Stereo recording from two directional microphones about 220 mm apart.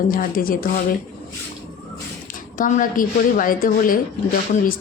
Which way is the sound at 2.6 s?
35° left (ahead or behind).